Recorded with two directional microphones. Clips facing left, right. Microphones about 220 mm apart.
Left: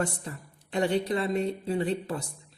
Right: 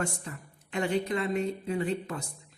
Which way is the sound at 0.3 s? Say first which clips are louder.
Left 3 dB; 35° left (ahead or behind).